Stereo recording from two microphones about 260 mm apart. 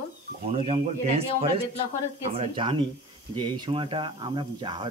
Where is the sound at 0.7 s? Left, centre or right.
Right.